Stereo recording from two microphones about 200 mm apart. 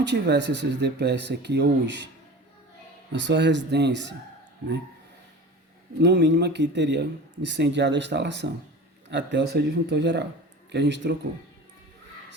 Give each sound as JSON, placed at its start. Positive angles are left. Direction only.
{"t": 0.0, "sound": "a man's voice", "side_deg": -60}
{"t": 3.1, "sound": "a man's voice", "side_deg": -60}
{"t": 6.0, "sound": "a man's voice", "side_deg": -60}